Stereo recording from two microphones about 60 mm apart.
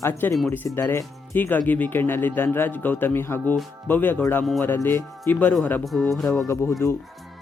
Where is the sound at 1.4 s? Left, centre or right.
Left.